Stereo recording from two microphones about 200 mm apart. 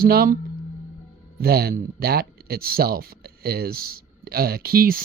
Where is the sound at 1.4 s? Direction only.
50° right (ahead or behind).